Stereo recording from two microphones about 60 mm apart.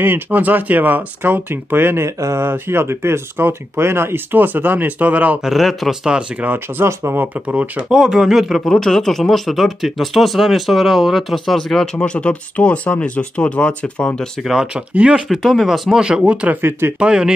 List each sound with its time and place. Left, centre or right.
0.0 s speech: right
2.0 s speech: right
2.3 s speech: right
5.4 s speech: centre
6.8 s speech: right
7.4 s speech: right
7.9 s speech: centre
14.4 s speech: centre
15.0 s speech: centre
15.2 s speech: centre
16.0 s speech: centre